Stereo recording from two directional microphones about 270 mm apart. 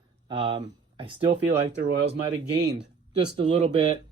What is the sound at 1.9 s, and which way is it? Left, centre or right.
Speech, right.